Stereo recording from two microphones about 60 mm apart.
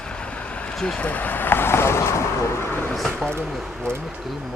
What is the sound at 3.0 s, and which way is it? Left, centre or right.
Speech, centre.